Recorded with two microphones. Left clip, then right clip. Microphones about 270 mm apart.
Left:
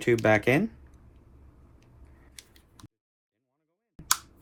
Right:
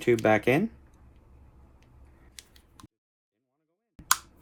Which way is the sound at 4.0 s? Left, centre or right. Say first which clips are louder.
Right 2 dB; centre.